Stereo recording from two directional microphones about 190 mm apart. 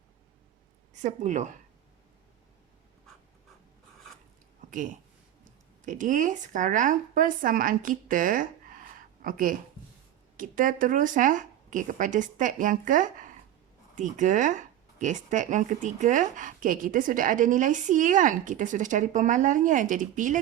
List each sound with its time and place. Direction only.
1.0 s speech: 40° right (ahead or behind)
5.8 s speech: 45° right (ahead or behind)